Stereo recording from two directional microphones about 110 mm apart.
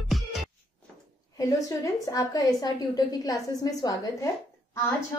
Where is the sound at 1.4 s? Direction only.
30° left (ahead or behind).